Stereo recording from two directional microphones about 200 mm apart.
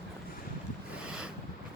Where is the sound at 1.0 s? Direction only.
5° right (ahead or behind).